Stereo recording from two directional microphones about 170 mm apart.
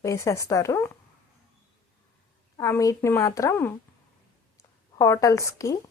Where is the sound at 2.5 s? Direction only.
20° left (ahead or behind).